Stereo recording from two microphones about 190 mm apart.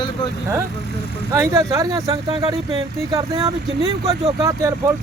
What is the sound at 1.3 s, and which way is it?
Speech, 15° right (ahead or behind).